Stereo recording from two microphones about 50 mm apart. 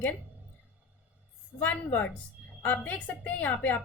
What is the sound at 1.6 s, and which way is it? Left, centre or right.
A woman's voice, left.